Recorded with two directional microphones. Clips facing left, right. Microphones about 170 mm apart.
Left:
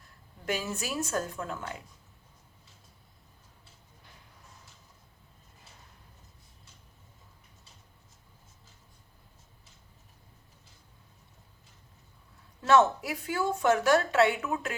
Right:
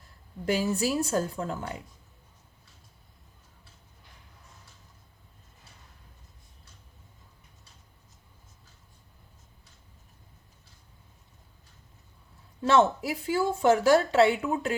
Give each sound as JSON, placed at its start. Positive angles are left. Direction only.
{"t": 0.4, "sound": "a woman's voice", "side_deg": -30}
{"t": 12.6, "sound": "speech", "side_deg": -30}